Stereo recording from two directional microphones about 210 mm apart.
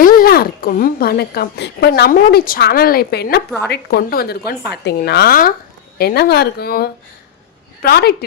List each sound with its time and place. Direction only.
0.0 s a woman's voice: 45° left (ahead or behind)